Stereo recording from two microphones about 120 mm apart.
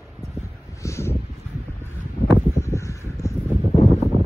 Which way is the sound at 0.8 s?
25° left (ahead or behind).